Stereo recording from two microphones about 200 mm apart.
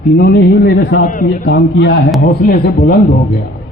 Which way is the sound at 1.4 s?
60° left (ahead or behind).